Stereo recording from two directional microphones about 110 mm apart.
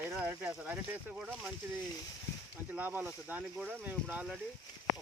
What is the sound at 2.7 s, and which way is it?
Speech, 15° right (ahead or behind).